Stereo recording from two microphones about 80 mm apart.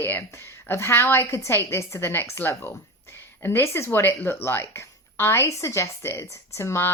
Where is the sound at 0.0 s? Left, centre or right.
Left.